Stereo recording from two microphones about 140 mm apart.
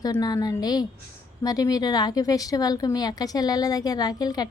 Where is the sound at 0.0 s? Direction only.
30° left (ahead or behind).